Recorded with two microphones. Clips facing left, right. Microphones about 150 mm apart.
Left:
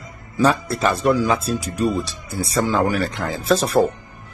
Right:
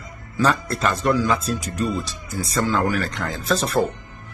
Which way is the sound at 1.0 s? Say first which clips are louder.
Left 1 dB; 10° left (ahead or behind).